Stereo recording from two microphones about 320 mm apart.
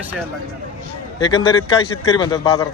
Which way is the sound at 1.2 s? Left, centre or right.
Centre.